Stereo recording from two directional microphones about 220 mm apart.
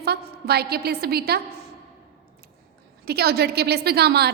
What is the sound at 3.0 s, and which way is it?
A woman's voice, 45° right (ahead or behind).